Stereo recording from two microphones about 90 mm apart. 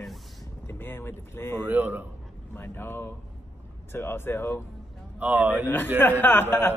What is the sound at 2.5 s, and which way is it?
Speech, 25° left (ahead or behind).